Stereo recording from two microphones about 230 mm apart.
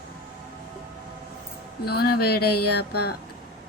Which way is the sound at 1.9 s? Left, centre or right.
Left.